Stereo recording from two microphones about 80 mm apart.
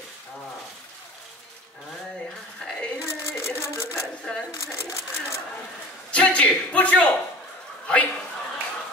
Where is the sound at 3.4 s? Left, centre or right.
Left.